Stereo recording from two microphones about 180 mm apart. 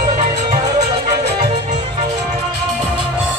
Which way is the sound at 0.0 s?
40° right (ahead or behind).